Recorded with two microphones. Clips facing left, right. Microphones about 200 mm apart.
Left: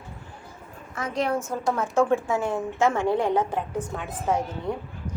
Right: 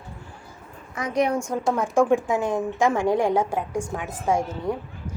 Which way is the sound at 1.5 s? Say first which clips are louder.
Right 2 dB; 10° right (ahead or behind).